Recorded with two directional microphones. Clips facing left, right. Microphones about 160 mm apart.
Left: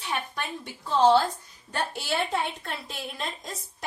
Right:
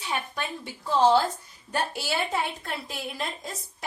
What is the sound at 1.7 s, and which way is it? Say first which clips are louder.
A woman's voice: right 1 dB; 5° right (ahead or behind).